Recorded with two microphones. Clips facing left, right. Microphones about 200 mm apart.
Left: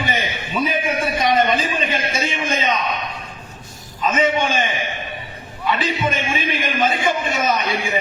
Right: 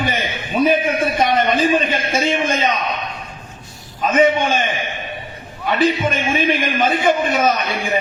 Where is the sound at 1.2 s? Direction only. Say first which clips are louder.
Right 1 dB; 50° right (ahead or behind).